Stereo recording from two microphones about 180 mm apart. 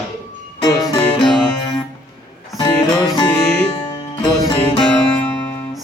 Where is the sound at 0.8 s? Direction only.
30° left (ahead or behind).